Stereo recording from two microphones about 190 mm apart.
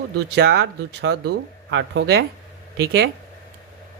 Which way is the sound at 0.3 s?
65° right (ahead or behind).